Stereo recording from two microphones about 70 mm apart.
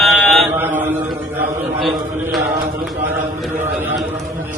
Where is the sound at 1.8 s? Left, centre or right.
Centre.